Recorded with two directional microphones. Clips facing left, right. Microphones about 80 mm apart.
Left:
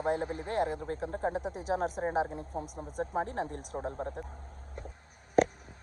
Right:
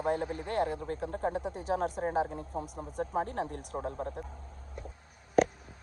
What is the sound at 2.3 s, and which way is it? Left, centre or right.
Speech, right.